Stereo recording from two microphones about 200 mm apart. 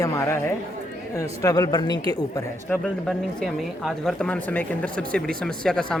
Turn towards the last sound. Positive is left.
turn(degrees=5)  # may be behind; listen again after turning